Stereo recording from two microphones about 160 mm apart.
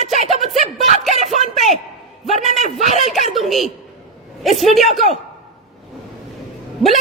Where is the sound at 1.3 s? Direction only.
45° left (ahead or behind).